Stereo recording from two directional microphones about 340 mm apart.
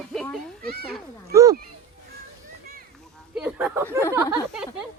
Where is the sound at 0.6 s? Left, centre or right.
Right.